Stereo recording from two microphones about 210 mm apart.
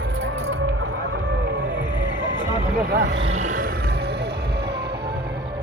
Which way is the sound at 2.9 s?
55° right (ahead or behind).